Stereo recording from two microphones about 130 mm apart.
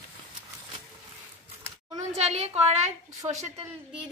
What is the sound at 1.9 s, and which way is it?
Speech, 55° right (ahead or behind).